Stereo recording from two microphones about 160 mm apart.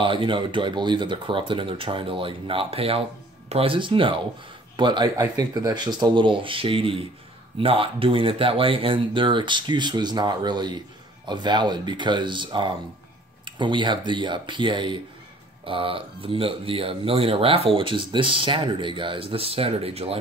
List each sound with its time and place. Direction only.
0.0 s speech: 30° right (ahead or behind)